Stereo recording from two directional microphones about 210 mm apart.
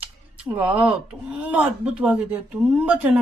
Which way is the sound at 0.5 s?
5° right (ahead or behind).